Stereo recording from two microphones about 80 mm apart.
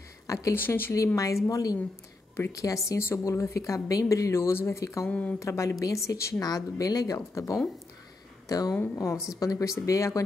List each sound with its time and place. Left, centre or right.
0.3 s speech: left
0.6 s speech: left
0.9 s speech: left
2.3 s a woman's voice: left
5.0 s speech: centre
5.4 s a woman's voice: left
6.4 s speech: left
8.9 s a woman's voice: left